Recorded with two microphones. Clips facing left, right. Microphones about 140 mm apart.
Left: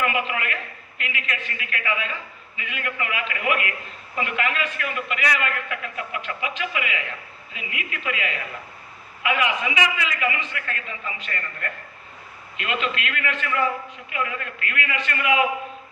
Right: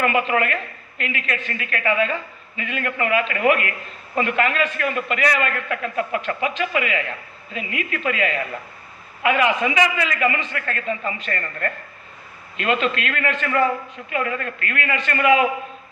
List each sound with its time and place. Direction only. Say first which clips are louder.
0.0 s a man's voice: right 5 dB; 40° right (ahead or behind)